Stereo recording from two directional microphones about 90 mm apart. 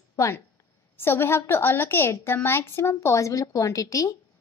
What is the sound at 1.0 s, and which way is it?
A woman's voice, 25° left (ahead or behind).